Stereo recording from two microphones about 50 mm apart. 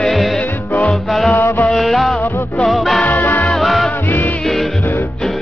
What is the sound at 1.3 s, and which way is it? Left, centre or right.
Mantra, left.